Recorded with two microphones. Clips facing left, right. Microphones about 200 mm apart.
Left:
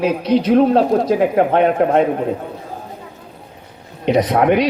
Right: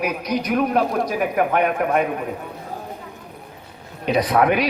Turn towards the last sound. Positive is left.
turn(degrees=20)  # may be behind; listen again after turning